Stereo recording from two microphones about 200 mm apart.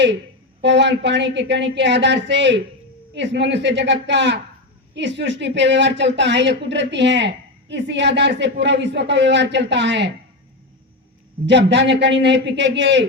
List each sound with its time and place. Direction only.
0.6 s speech: 60° right (ahead or behind)
11.4 s speech: 60° right (ahead or behind)